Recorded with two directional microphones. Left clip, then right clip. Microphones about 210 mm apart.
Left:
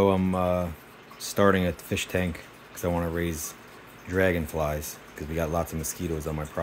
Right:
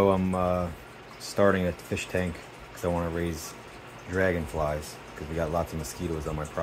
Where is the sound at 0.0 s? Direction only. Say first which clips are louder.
Left 1 dB; 20° left (ahead or behind).